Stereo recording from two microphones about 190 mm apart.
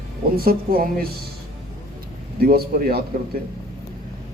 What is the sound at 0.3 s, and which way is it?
Speech, 50° right (ahead or behind).